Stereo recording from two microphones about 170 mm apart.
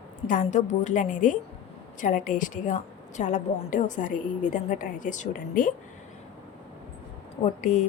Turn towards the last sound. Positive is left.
turn(degrees=45)  # may be behind; listen again after turning